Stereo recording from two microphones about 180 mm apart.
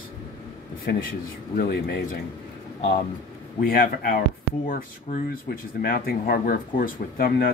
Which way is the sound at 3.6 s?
55° left (ahead or behind).